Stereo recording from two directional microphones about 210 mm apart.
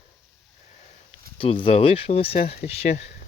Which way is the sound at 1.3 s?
25° left (ahead or behind).